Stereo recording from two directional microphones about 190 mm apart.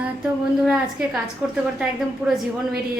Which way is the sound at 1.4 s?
5° right (ahead or behind).